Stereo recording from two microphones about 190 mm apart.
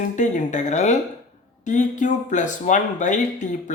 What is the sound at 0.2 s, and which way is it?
Speech, 40° left (ahead or behind).